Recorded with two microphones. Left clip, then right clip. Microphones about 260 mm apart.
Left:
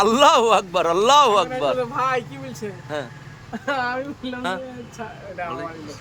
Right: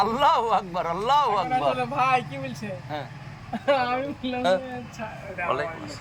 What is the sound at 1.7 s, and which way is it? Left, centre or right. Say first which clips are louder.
Speech: left 1 dB; centre.